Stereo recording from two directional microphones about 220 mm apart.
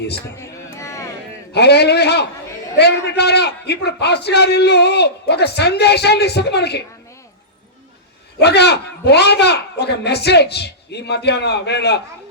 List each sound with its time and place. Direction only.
0.3 s a sound: 15° left (ahead or behind)
1.5 s a man's voice: 50° left (ahead or behind)
8.4 s a man's voice: 50° left (ahead or behind)